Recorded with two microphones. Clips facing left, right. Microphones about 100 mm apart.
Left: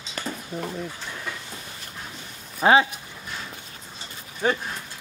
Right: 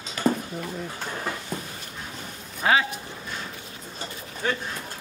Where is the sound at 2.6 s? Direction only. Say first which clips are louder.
Left 5 dB; 25° left (ahead or behind).